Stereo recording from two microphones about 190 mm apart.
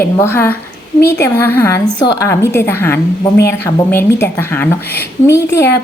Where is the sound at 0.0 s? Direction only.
10° left (ahead or behind).